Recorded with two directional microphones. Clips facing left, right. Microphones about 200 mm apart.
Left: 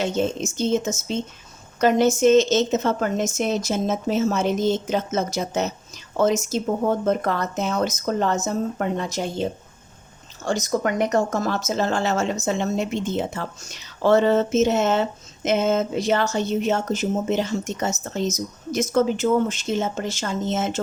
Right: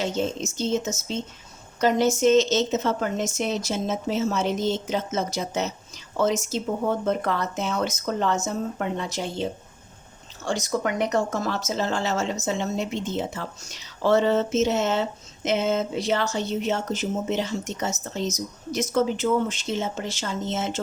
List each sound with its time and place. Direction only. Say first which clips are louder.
0.0 s speech: left 3 dB; 55° left (ahead or behind)